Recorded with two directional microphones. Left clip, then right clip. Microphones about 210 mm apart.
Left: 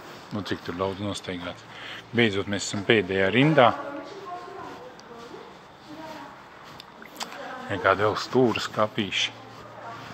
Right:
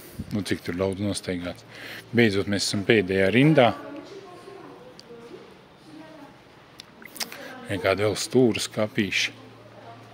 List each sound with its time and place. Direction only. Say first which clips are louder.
0.3 s speech: right 3 dB; 60° right (ahead or behind)
7.6 s speech: left 1 dB; 50° right (ahead or behind)